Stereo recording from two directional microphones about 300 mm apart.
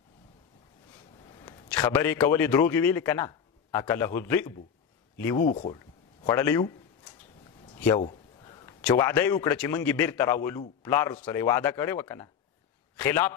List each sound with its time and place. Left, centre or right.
1.3 s a sound: centre
2.1 s a man's voice: centre
5.4 s speech: left
6.2 s a man's voice: centre
8.0 s a man's voice: centre